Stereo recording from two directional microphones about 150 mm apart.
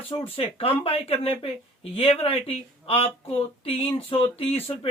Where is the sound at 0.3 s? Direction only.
40° left (ahead or behind).